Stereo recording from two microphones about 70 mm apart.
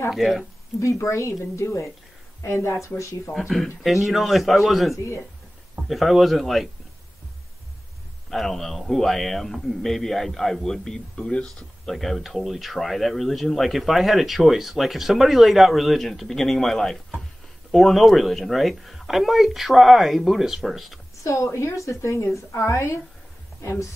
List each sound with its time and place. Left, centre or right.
0.1 s a man's voice: centre
0.7 s a woman's voice: left
3.3 s a man's voice: centre
4.9 s a woman's voice: left
5.9 s a man's voice: centre
8.3 s a man's voice: centre
21.2 s a woman's voice: left
23.6 s a woman's voice: left